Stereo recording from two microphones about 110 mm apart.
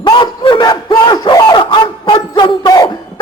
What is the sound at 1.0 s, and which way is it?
Battle cry, 45° left (ahead or behind).